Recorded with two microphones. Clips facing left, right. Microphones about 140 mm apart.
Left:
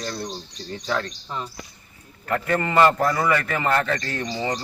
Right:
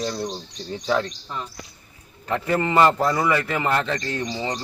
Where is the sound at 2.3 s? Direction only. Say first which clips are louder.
Right 1 dB; 10° right (ahead or behind).